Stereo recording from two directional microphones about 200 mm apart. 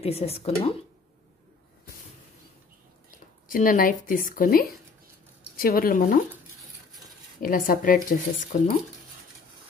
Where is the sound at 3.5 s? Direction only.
45° left (ahead or behind).